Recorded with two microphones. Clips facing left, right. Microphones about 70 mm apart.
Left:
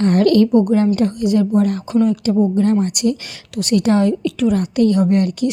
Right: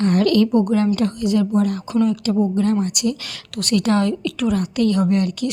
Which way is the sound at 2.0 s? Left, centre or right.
Left.